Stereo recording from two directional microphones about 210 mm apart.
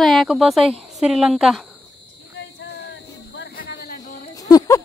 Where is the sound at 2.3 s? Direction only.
55° left (ahead or behind).